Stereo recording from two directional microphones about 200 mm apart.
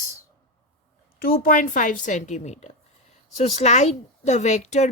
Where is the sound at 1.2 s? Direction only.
45° left (ahead or behind).